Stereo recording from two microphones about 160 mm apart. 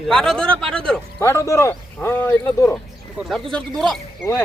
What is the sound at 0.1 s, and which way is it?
Speech, 5° left (ahead or behind).